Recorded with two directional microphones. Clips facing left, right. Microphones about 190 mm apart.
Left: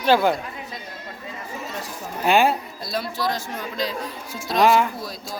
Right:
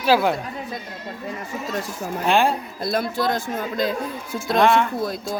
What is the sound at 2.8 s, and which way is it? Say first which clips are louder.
Speech: right 4 dB; 55° right (ahead or behind).